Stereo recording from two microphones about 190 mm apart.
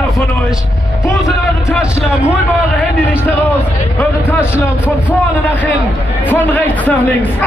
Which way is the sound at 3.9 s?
10° left (ahead or behind).